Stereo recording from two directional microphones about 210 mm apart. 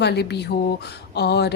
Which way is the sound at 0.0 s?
55° left (ahead or behind).